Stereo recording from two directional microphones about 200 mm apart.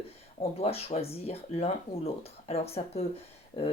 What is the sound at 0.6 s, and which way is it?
Speech, 30° left (ahead or behind).